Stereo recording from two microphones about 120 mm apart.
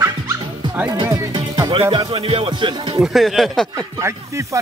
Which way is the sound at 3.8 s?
30° right (ahead or behind).